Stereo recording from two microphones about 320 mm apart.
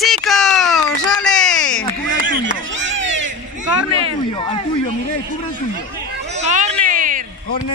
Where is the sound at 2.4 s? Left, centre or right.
Right.